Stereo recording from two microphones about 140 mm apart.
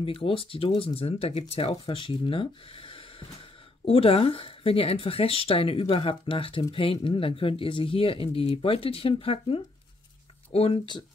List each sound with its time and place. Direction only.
0.0 s speech: 40° left (ahead or behind)